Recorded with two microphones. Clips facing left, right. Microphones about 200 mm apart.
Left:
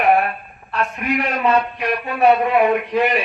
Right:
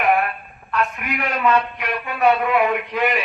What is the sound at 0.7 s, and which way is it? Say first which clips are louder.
A man's voice: left 2 dB; 35° left (ahead or behind).